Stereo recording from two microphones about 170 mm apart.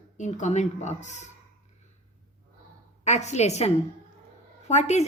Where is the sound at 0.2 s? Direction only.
45° left (ahead or behind).